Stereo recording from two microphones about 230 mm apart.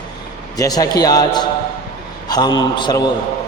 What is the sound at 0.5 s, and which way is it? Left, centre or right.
A man's voice, centre.